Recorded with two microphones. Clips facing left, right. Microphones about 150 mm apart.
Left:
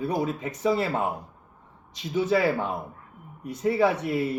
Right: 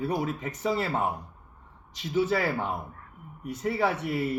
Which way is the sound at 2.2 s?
15° left (ahead or behind).